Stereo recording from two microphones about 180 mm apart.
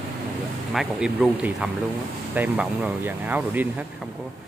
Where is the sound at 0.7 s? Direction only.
Centre (ahead or behind).